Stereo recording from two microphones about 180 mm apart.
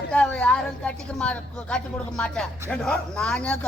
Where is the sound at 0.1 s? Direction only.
5° left (ahead or behind).